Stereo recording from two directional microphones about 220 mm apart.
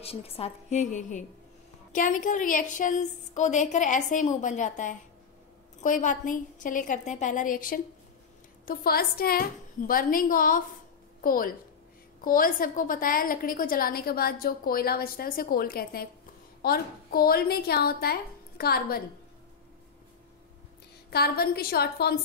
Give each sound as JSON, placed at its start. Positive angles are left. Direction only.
{"t": 0.0, "sound": "a woman's voice", "side_deg": 25}
{"t": 21.1, "sound": "a woman's voice", "side_deg": 45}